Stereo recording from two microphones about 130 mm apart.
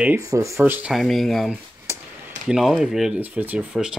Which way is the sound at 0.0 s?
20° right (ahead or behind).